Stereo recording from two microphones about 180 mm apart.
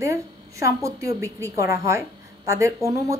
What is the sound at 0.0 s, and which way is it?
A woman's voice, 15° right (ahead or behind).